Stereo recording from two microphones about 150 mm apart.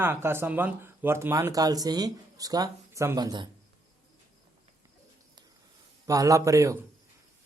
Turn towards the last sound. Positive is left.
turn(degrees=-20)  # may be behind; listen again after turning